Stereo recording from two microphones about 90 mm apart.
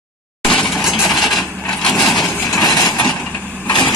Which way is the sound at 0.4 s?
5° left (ahead or behind).